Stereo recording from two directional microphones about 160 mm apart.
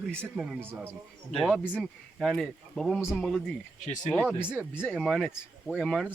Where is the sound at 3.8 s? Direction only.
50° left (ahead or behind).